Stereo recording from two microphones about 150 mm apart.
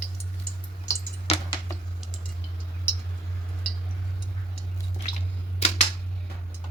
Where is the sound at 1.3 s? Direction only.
45° left (ahead or behind).